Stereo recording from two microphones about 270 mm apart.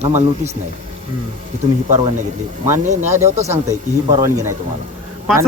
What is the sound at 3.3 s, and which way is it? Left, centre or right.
Speech, right.